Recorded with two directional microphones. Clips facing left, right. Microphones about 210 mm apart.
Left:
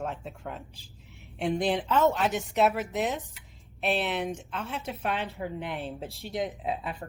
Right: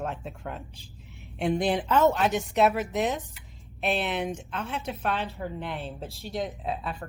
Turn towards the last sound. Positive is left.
turn(degrees=20)  # may be behind; listen again after turning